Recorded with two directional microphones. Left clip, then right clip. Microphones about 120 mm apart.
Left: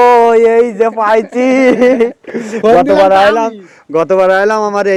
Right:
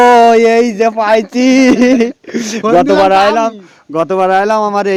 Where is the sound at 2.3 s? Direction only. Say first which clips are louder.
Even; 90° right.